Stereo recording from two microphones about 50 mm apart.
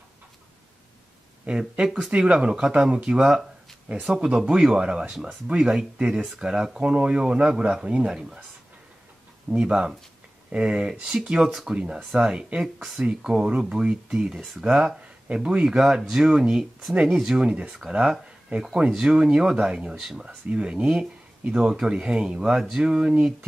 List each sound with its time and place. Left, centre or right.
1.5 s speech: centre
5.1 s speech: centre
9.5 s speech: centre
14.4 s speech: centre
15.2 s speech: centre
20.0 s speech: centre
20.4 s speech: right